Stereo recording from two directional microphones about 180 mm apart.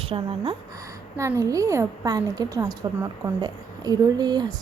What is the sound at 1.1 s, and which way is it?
A woman's voice, 15° right (ahead or behind).